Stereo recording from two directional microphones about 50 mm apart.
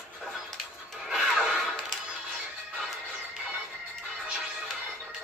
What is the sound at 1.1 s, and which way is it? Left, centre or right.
Music, centre.